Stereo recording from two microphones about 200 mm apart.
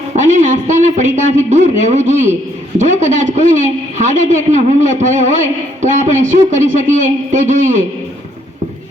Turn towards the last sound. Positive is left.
turn(degrees=-35)  # may be behind; listen again after turning